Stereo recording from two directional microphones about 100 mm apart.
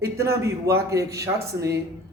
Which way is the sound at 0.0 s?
30° right (ahead or behind).